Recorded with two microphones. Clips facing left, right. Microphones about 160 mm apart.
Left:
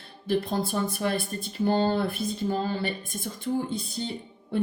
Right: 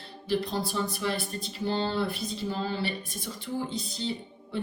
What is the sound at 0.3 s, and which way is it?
A woman's voice, 50° left (ahead or behind).